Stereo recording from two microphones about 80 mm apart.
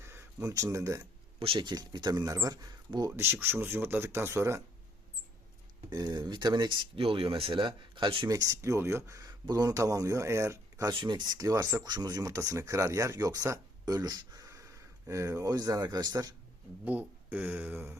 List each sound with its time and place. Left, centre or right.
0.0 s a sound: right
0.4 s speech: right
1.5 s speech: right
3.2 s speech: right
5.9 s speech: right
8.3 s speech: right
10.9 s speech: right
11.3 s speech: right
11.9 s speech: right
15.4 s speech: right
16.8 s speech: right